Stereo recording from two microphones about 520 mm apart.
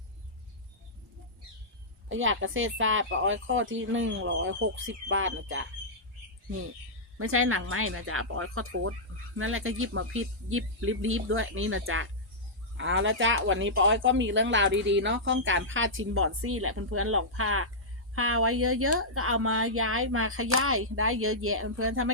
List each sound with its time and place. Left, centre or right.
2.0 s speech: right
7.2 s speech: right